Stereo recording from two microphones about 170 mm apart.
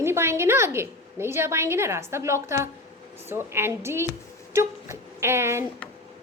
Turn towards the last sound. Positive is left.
turn(degrees=-15)  # may be behind; listen again after turning